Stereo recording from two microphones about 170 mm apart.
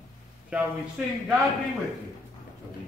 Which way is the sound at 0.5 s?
5° right (ahead or behind).